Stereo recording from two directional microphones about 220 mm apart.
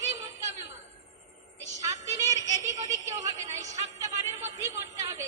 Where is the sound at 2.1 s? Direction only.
15° right (ahead or behind).